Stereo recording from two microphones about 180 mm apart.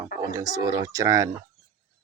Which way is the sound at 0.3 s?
20° right (ahead or behind).